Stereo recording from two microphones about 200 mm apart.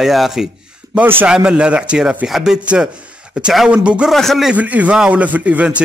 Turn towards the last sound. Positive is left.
turn(degrees=-5)  # may be behind; listen again after turning